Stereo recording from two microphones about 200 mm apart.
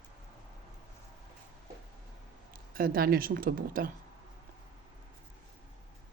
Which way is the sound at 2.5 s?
45° right (ahead or behind).